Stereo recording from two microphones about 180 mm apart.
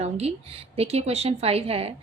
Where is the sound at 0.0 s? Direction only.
35° right (ahead or behind).